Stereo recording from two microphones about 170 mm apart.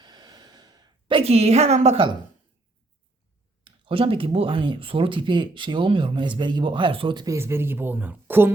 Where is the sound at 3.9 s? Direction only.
30° right (ahead or behind).